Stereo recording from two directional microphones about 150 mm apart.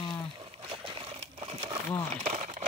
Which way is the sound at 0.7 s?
40° right (ahead or behind).